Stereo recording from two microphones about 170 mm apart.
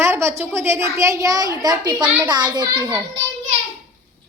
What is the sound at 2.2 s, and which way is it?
Speech, 25° right (ahead or behind).